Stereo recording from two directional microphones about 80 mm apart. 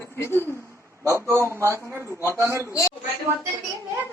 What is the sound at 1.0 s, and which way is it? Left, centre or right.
A man's voice, right.